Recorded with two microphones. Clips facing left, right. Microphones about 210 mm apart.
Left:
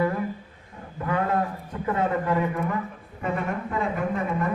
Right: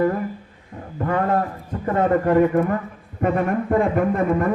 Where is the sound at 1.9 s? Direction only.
50° right (ahead or behind).